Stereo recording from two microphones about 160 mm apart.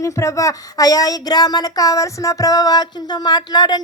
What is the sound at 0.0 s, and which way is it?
Speech, 20° left (ahead or behind).